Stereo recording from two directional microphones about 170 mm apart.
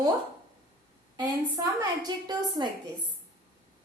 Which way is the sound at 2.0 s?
25° right (ahead or behind).